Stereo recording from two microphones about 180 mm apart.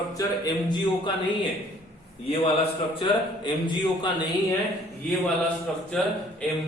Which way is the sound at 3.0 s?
25° left (ahead or behind).